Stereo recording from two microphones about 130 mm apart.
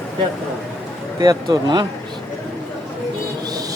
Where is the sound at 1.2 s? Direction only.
35° right (ahead or behind).